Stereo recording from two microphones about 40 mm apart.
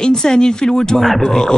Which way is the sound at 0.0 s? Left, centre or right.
Centre.